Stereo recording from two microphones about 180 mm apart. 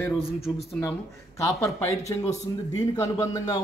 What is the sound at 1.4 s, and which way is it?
Speech, 15° left (ahead or behind).